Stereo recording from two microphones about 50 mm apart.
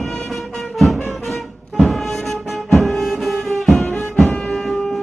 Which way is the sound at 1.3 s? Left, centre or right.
Centre.